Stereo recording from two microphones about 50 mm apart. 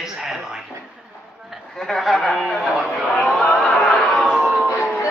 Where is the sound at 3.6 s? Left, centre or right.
Centre.